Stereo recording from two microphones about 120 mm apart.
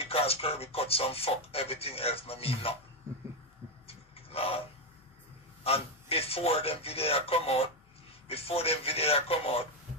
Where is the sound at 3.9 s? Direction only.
55° left (ahead or behind).